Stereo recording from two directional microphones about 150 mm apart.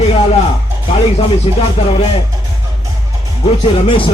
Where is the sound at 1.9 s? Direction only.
40° left (ahead or behind).